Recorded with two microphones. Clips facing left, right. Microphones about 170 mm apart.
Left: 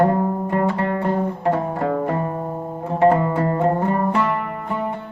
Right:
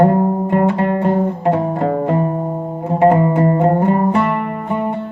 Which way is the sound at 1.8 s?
30° right (ahead or behind).